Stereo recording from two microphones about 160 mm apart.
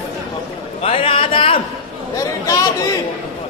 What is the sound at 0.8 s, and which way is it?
Speech, 35° left (ahead or behind).